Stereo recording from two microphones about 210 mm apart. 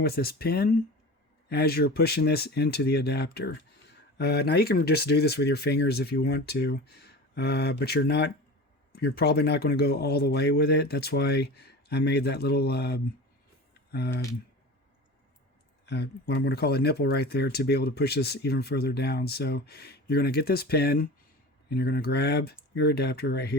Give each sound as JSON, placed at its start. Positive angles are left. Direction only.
{"t": 0.0, "sound": "speech", "side_deg": 45}
{"t": 15.9, "sound": "speech", "side_deg": 50}